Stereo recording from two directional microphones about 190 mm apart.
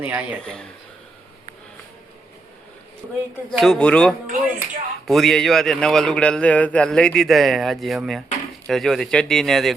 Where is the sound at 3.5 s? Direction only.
5° left (ahead or behind).